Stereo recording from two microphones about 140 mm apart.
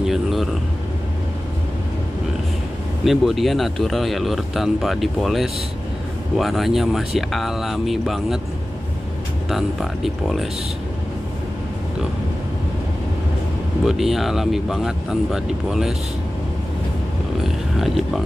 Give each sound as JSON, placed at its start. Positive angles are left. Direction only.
{"t": 0.0, "sound": "speech", "side_deg": 0}
{"t": 3.1, "sound": "a man's voice", "side_deg": 0}
{"t": 9.5, "sound": "a man's voice", "side_deg": 0}
{"t": 13.8, "sound": "a man's voice", "side_deg": 0}
{"t": 17.4, "sound": "a sound", "side_deg": 0}